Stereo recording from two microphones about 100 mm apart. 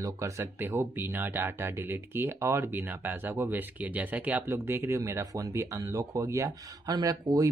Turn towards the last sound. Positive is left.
turn(degrees=-40)  # may be behind; listen again after turning